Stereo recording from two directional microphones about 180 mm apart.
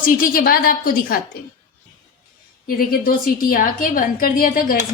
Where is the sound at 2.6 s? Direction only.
55° left (ahead or behind).